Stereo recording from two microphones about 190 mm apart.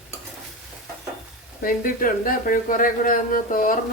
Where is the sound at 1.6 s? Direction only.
45° left (ahead or behind).